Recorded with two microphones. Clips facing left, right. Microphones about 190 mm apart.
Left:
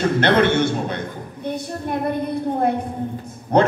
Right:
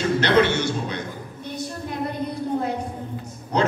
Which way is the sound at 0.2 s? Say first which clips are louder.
Left 3 dB; 55° left (ahead or behind).